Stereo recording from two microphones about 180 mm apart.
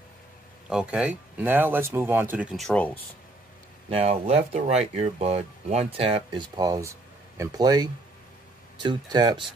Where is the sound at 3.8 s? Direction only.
35° right (ahead or behind).